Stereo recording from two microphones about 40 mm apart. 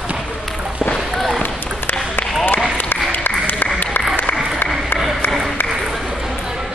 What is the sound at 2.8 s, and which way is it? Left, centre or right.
Applause, left.